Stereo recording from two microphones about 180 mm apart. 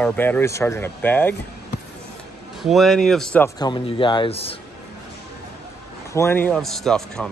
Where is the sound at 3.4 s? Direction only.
25° left (ahead or behind).